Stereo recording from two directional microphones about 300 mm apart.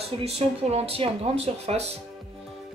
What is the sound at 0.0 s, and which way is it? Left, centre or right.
Speech, centre.